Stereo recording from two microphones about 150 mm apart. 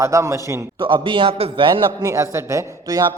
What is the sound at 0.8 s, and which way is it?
A man's voice, 35° right (ahead or behind).